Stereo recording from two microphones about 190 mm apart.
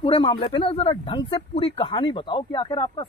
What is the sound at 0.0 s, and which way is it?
Speech, 25° left (ahead or behind).